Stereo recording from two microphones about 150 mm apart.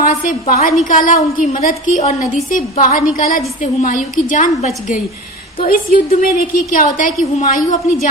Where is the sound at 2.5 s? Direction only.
65° left (ahead or behind).